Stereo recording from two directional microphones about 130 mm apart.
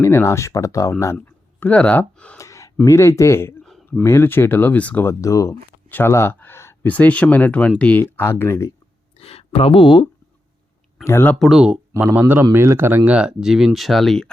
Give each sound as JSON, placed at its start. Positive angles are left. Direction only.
{"t": 0.0, "sound": "speech", "side_deg": 20}
{"t": 2.4, "sound": "gasp", "side_deg": 25}
{"t": 2.8, "sound": "speech", "side_deg": 20}
{"t": 3.6, "sound": "a sound", "side_deg": 0}
{"t": 4.0, "sound": "speech", "side_deg": 20}
{"t": 9.1, "sound": "speech", "side_deg": 50}
{"t": 11.0, "sound": "speech", "side_deg": 15}
{"t": 11.3, "sound": "speech", "side_deg": -5}